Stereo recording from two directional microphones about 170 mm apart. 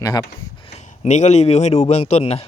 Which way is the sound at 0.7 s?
40° left (ahead or behind).